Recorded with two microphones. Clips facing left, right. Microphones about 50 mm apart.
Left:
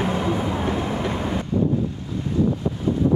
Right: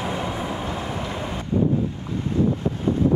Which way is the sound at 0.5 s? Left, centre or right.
Left.